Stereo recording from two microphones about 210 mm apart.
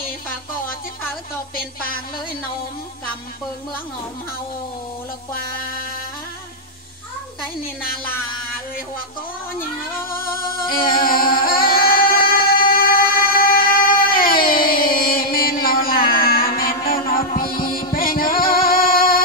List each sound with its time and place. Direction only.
10.0 s music: 45° left (ahead or behind)